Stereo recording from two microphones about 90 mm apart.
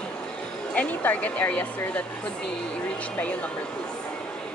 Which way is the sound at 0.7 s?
15° left (ahead or behind).